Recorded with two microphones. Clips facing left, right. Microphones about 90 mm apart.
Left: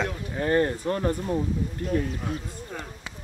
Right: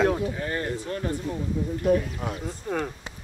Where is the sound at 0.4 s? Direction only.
40° left (ahead or behind).